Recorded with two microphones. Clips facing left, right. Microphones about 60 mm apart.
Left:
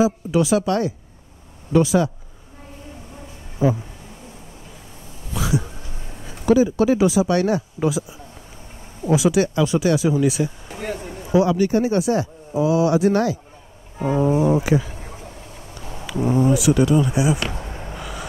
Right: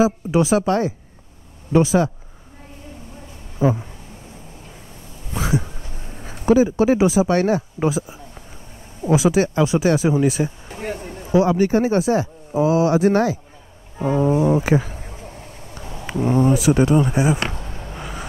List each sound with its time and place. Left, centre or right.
0.0 s speech: right
3.6 s speech: right
5.3 s speech: right
14.6 s speech: right
15.1 s vehicle: right
16.3 s speech: right
17.6 s a sound: left
17.9 s vehicle: right